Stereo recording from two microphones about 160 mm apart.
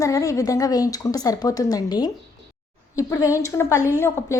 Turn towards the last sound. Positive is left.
turn(degrees=15)  # may be behind; listen again after turning